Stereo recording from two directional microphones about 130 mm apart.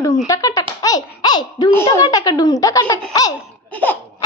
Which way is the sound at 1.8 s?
25° left (ahead or behind).